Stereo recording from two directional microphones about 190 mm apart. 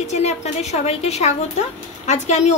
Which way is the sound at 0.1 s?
35° left (ahead or behind).